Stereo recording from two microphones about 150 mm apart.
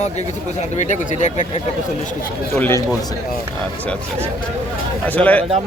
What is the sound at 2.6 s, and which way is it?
Speech, 15° left (ahead or behind).